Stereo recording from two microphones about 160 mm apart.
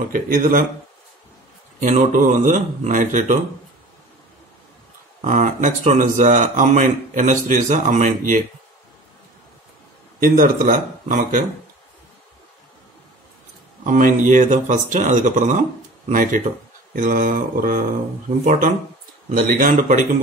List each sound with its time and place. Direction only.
0.1 s speech: 55° right (ahead or behind)
1.8 s speech: 50° right (ahead or behind)
5.2 s speech: 55° right (ahead or behind)
10.2 s speech: 60° right (ahead or behind)
13.8 s speech: 50° right (ahead or behind)